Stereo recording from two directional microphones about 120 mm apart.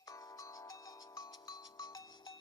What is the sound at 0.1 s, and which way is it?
Music, 30° left (ahead or behind).